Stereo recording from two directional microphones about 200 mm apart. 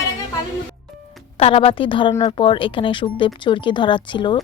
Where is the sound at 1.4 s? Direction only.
30° left (ahead or behind).